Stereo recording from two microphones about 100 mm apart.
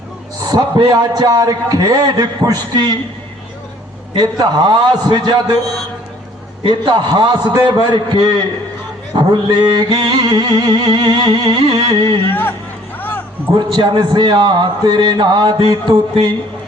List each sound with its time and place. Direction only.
0.4 s a man's voice: 40° right (ahead or behind)
4.1 s music: 45° right (ahead or behind)
6.7 s music: 50° right (ahead or behind)
12.3 s speech: 20° left (ahead or behind)
13.0 s music: 20° left (ahead or behind)
13.6 s music: 45° right (ahead or behind)